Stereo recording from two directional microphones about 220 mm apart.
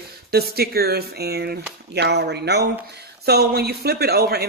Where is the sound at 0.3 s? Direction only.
45° right (ahead or behind).